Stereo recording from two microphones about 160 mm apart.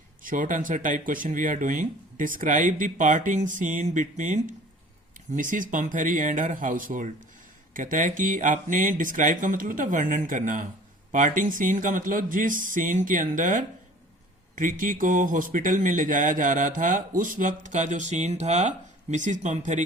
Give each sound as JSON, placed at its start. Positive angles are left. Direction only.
{"t": 0.2, "sound": "speech", "side_deg": -55}